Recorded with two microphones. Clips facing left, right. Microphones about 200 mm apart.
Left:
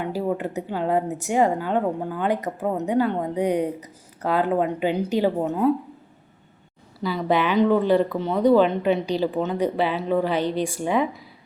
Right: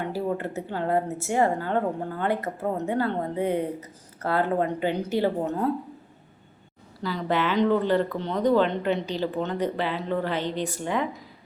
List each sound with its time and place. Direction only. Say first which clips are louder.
0.0 s a woman's voice: left 3 dB; 15° left (ahead or behind)
7.0 s a woman's voice: left 4 dB; 10° left (ahead or behind)